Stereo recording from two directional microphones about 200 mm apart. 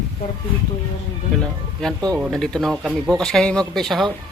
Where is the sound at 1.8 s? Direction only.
5° left (ahead or behind).